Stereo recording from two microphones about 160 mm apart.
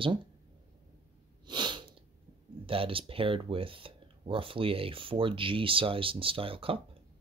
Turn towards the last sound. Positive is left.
turn(degrees=-35)  # may be behind; listen again after turning